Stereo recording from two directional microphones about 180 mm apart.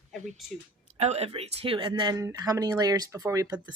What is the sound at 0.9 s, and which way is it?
Speech, 35° right (ahead or behind).